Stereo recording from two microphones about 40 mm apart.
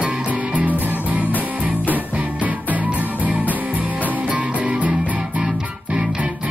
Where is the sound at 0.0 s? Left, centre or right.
Right.